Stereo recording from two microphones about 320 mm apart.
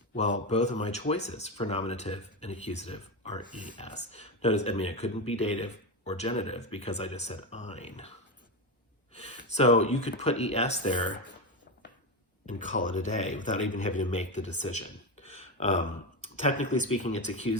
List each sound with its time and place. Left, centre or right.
0.1 s speech: left
9.1 s speech: centre
12.5 s speech: left